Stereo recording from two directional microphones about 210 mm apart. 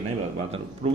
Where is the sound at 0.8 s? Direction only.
30° right (ahead or behind).